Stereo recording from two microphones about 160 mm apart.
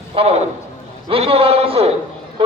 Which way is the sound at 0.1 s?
40° right (ahead or behind).